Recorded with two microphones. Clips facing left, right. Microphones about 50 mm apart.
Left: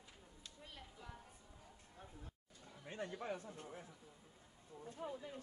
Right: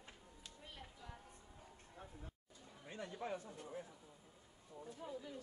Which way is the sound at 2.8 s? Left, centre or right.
Left.